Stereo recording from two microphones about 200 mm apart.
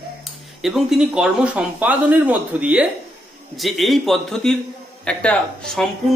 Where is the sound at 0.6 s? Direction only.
Centre (ahead or behind).